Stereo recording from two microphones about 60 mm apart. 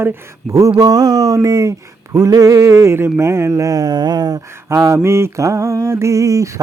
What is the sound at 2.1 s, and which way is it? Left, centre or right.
Mantra, right.